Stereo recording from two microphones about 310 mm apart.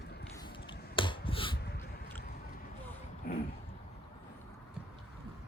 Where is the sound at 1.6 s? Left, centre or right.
Left.